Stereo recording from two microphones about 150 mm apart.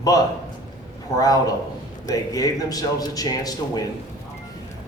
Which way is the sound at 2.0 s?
25° left (ahead or behind).